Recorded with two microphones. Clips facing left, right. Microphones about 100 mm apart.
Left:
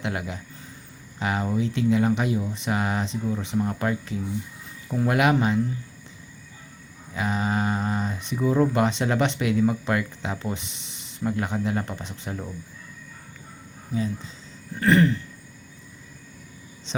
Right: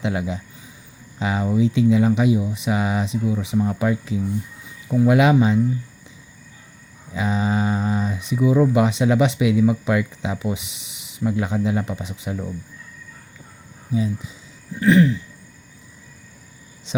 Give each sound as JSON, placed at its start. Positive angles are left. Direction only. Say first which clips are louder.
{"t": 0.0, "sound": "speech", "louder": "right 6 dB", "side_deg": -20}
{"t": 7.1, "sound": "speech", "louder": "right 4 dB", "side_deg": -20}
{"t": 13.9, "sound": "speech", "louder": "right 4 dB", "side_deg": -15}
{"t": 14.8, "sound": "throat clearing", "louder": "right 4 dB", "side_deg": 0}